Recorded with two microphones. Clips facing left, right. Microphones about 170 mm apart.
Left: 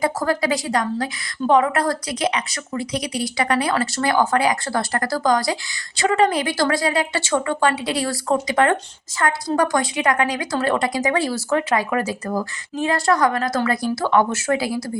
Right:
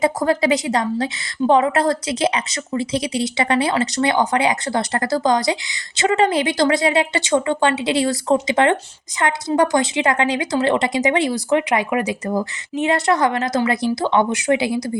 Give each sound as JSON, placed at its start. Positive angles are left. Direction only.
{"t": 0.0, "sound": "a woman's voice", "side_deg": -25}